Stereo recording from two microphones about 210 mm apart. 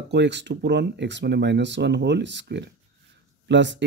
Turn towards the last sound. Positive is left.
turn(degrees=-60)  # may be behind; listen again after turning